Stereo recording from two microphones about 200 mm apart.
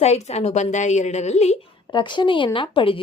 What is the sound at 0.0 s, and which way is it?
A woman's voice, 35° left (ahead or behind).